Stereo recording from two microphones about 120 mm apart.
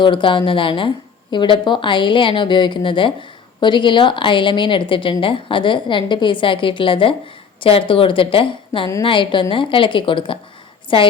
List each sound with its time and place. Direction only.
0.0 s speech: 45° left (ahead or behind)